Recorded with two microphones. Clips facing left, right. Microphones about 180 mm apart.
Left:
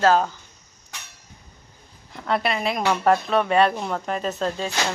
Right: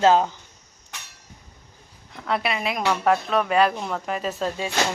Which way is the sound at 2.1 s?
Centre (ahead or behind).